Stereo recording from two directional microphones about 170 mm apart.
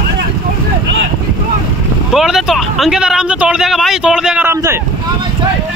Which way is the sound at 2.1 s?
Centre (ahead or behind).